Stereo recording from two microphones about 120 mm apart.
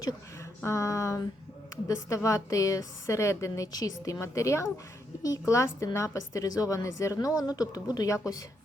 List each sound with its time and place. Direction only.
0.6 s a woman's voice: 25° left (ahead or behind)